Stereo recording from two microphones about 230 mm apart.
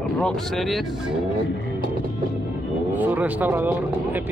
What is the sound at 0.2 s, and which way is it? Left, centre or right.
Speech, centre.